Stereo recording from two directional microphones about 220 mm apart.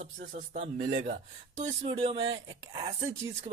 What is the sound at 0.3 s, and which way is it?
Speech, 35° right (ahead or behind).